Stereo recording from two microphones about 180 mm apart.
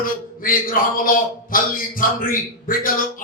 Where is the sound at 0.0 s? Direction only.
50° left (ahead or behind).